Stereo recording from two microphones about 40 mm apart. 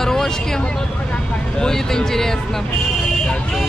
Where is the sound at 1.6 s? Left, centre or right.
Centre.